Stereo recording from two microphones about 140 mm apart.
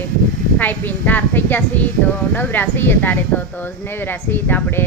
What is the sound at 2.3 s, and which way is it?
Speech, 15° left (ahead or behind).